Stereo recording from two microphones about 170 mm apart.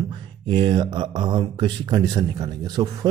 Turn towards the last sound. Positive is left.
turn(degrees=-25)  # may be behind; listen again after turning